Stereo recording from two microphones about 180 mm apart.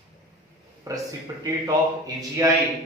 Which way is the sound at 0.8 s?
15° right (ahead or behind).